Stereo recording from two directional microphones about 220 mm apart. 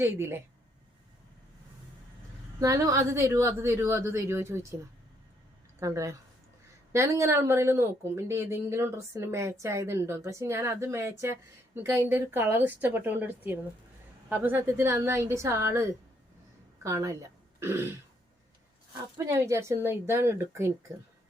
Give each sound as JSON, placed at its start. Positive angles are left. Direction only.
{"t": 0.0, "sound": "speech", "side_deg": -10}
{"t": 2.6, "sound": "speech", "side_deg": -15}
{"t": 5.8, "sound": "speech", "side_deg": -15}
{"t": 19.1, "sound": "speech", "side_deg": -15}